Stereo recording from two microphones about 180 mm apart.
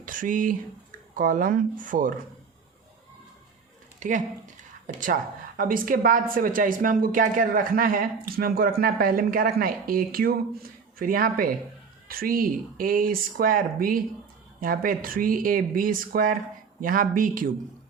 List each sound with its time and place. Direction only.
0.0 s speech: 50° right (ahead or behind)
4.0 s speech: 45° right (ahead or behind)
5.5 s speech: 50° right (ahead or behind)